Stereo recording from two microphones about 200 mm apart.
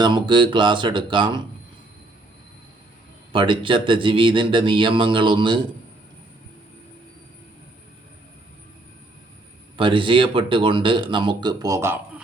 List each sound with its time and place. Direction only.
0.0 s speech: 25° right (ahead or behind)
3.3 s speech: 25° right (ahead or behind)
9.7 s speech: 25° right (ahead or behind)